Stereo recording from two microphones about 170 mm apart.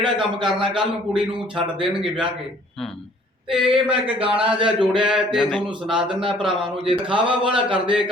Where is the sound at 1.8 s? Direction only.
5° right (ahead or behind).